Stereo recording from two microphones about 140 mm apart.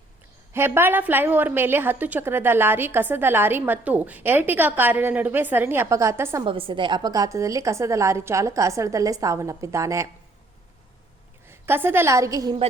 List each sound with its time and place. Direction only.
0.5 s a woman's voice: 15° right (ahead or behind)
6.4 s a woman's voice: 40° right (ahead or behind); by 10.1 s 20° right (ahead or behind)
11.4 s a woman's voice: 15° right (ahead or behind)